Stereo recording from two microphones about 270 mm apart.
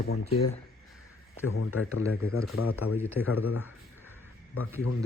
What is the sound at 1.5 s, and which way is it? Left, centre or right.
Speech, left.